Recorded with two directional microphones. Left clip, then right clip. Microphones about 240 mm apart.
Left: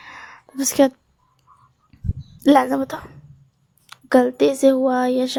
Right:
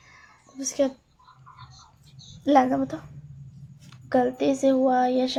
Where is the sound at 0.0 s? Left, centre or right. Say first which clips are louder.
Left 13 dB; left.